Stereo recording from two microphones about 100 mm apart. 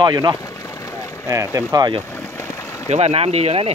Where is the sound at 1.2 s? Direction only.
30° right (ahead or behind).